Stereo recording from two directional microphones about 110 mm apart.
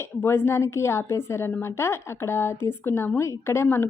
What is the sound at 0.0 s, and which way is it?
A woman's voice, 20° left (ahead or behind).